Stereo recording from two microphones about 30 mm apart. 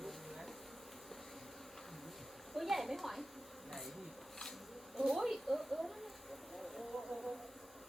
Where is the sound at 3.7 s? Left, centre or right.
Centre.